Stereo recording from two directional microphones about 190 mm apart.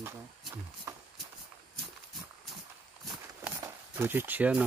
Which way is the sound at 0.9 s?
15° right (ahead or behind).